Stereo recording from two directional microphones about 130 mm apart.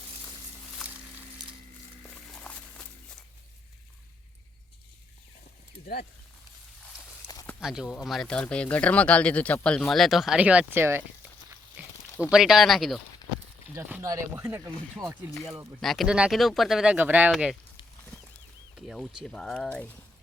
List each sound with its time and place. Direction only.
2.3 s walk: 5° left (ahead or behind)
7.6 s speech: 5° right (ahead or behind)
11.8 s a sound: 15° right (ahead or behind)
12.3 s speech: 5° right (ahead or behind)
13.7 s speech: 20° right (ahead or behind)
15.4 s speech: centre (ahead or behind)
17.3 s speech: centre (ahead or behind)
18.9 s speech: centre (ahead or behind)